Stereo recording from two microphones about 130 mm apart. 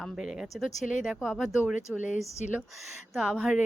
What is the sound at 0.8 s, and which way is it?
Speech, 75° left (ahead or behind).